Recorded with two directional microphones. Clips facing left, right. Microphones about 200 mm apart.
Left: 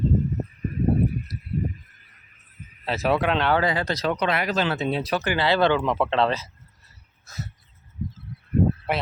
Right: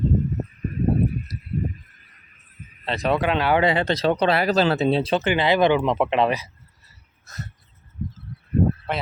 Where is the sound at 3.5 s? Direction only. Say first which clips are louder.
Right 3 dB; 25° right (ahead or behind).